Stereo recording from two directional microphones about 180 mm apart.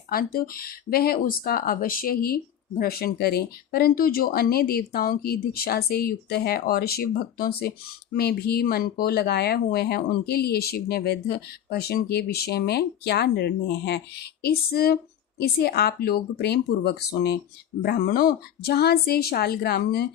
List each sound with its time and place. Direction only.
0.1 s speech: 55° left (ahead or behind)